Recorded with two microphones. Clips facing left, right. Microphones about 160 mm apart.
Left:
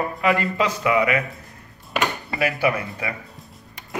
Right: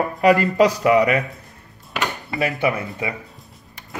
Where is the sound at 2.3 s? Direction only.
25° right (ahead or behind).